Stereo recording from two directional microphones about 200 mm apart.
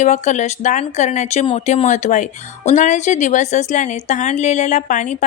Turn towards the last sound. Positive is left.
turn(degrees=40)  # may be behind; listen again after turning